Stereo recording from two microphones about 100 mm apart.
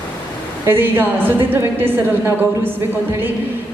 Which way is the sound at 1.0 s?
20° right (ahead or behind).